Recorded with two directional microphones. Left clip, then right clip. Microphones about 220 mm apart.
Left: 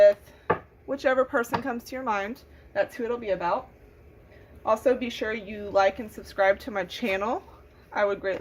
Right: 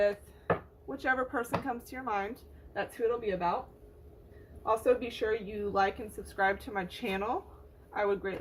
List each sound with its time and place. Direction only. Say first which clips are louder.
0.9 s a woman's voice: left 8 dB; 50° left (ahead or behind)
4.6 s a woman's voice: left 5 dB; 50° left (ahead or behind)